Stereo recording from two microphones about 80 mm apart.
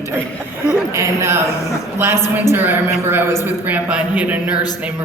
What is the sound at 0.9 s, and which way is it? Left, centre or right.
Speech, right.